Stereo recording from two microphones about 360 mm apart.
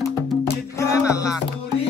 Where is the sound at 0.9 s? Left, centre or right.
Centre.